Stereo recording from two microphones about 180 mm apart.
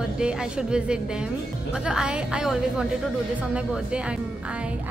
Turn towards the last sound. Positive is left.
turn(degrees=-5)  # may be behind; listen again after turning